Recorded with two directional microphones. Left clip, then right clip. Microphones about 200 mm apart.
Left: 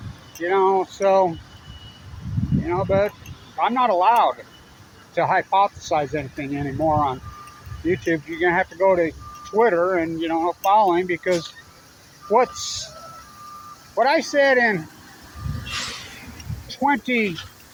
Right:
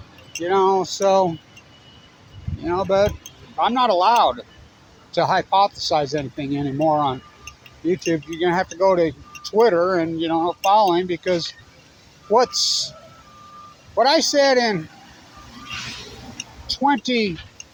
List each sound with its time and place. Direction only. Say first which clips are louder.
0.3 s speech: right 1 dB; 25° right (ahead or behind)
2.6 s speech: right 2 dB; 25° right (ahead or behind)
12.5 s a man's voice: right 9 dB; 60° right (ahead or behind)
13.9 s speech: right 2 dB; 30° right (ahead or behind)
16.7 s speech: right 1 dB; 25° right (ahead or behind)